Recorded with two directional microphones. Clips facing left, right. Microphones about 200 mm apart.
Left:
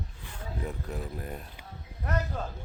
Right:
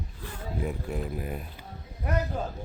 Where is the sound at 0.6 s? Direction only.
15° right (ahead or behind).